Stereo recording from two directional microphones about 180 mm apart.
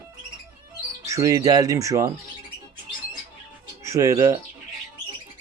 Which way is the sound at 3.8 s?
15° right (ahead or behind).